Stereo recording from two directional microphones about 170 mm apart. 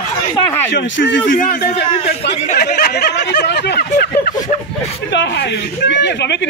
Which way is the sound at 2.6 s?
70° left (ahead or behind).